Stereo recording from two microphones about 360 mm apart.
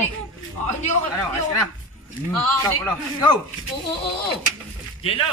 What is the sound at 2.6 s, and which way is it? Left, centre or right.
Speech, centre.